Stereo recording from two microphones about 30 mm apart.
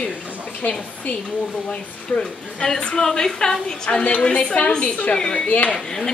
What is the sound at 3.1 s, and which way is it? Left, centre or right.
Speech, left.